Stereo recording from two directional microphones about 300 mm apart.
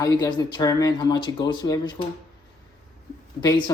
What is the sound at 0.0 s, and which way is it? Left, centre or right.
Speech, centre.